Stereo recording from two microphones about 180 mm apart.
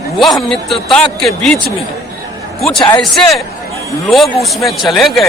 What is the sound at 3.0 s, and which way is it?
A man's voice, centre (ahead or behind).